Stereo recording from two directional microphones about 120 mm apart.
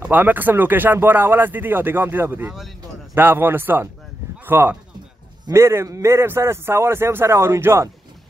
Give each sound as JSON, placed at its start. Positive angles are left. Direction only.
{"t": 0.0, "sound": "a man's voice", "side_deg": -15}